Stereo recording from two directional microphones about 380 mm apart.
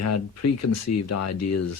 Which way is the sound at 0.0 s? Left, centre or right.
Left.